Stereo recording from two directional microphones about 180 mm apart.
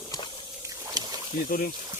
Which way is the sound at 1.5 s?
55° left (ahead or behind).